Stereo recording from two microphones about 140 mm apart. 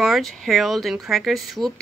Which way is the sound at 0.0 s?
Centre (ahead or behind).